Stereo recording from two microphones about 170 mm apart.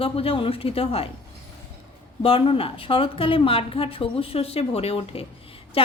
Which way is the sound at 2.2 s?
30° left (ahead or behind).